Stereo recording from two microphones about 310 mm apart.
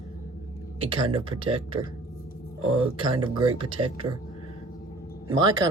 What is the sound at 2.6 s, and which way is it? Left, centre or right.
Speech, right.